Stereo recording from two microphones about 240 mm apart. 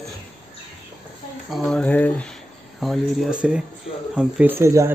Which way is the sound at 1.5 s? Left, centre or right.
Centre.